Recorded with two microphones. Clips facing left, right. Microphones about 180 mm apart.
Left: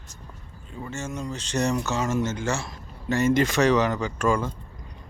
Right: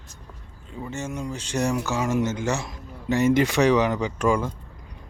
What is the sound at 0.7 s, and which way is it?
Speech, 15° right (ahead or behind).